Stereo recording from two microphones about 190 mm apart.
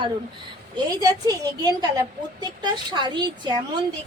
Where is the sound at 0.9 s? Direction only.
20° right (ahead or behind).